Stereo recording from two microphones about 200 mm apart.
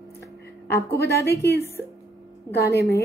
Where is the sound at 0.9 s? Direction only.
50° left (ahead or behind).